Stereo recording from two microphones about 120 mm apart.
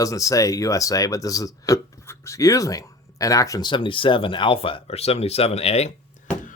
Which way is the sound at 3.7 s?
45° left (ahead or behind).